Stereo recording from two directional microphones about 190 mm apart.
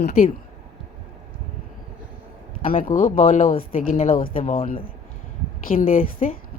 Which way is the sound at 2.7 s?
45° left (ahead or behind).